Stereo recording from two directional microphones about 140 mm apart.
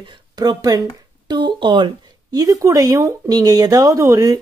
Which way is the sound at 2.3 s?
25° right (ahead or behind).